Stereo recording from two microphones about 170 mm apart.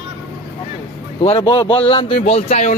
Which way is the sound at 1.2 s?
35° left (ahead or behind).